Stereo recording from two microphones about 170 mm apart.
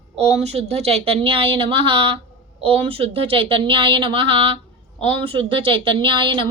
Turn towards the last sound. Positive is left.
turn(degrees=-30)  # may be behind; listen again after turning